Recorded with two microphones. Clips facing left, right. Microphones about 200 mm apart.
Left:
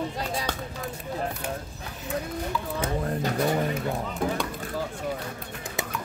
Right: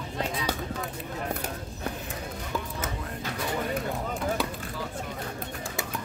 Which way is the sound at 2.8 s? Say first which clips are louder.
Left 7 dB; 40° left (ahead or behind).